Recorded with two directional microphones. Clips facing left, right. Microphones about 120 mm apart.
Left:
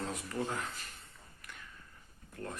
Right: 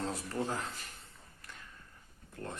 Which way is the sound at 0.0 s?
30° right (ahead or behind).